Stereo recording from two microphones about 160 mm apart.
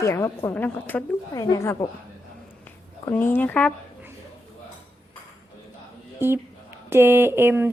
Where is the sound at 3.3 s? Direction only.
10° left (ahead or behind).